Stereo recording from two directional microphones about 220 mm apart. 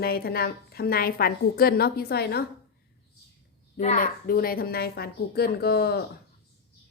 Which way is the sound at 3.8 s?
35° left (ahead or behind).